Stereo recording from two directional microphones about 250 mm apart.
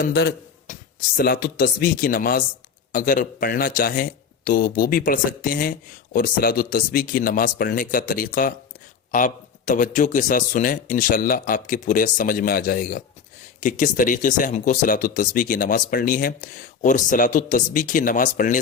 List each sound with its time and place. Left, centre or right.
0.0 s speech: left